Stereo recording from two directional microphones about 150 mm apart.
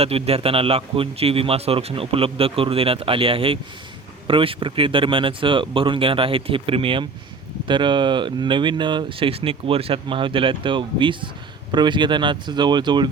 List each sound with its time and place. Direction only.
0.0 s a man's voice: 40° right (ahead or behind)